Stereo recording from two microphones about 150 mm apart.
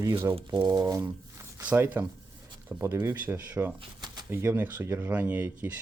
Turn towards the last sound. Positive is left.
turn(degrees=-10)  # may be behind; listen again after turning